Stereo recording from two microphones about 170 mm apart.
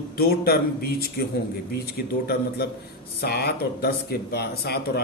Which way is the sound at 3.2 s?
70° left (ahead or behind).